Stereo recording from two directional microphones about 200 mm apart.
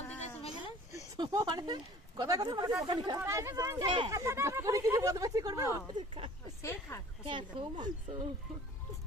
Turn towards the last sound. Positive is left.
turn(degrees=-25)  # may be behind; listen again after turning